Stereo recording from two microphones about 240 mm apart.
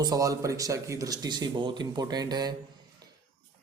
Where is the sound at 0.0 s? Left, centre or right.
Centre.